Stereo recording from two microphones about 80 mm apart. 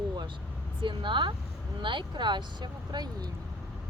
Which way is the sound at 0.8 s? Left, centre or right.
Right.